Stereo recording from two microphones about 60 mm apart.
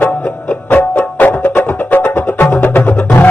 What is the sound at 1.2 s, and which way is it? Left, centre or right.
Music, left.